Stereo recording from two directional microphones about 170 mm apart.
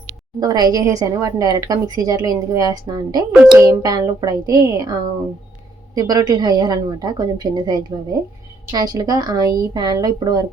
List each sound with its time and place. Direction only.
0.3 s a woman's voice: 25° right (ahead or behind)